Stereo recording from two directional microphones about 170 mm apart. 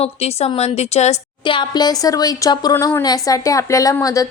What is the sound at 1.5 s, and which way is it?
A woman's voice, 25° left (ahead or behind).